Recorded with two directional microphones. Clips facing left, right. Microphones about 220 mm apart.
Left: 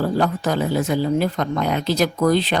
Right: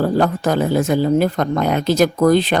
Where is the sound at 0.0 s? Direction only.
50° right (ahead or behind).